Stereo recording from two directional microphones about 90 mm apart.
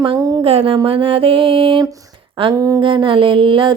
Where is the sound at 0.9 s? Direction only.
75° right (ahead or behind).